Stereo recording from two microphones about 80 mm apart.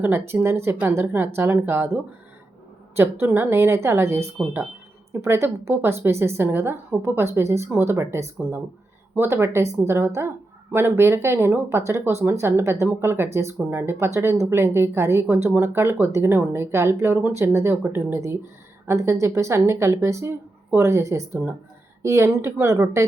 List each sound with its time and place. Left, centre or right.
0.0 s speech: right
4.4 s speech: centre
5.1 s speech: right